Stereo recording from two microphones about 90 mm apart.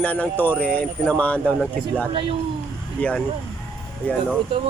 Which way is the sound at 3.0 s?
15° left (ahead or behind).